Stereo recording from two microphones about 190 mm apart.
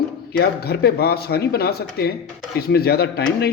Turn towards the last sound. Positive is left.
turn(degrees=55)  # may be behind; listen again after turning